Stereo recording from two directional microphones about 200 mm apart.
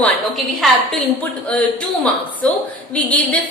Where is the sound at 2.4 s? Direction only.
5° left (ahead or behind).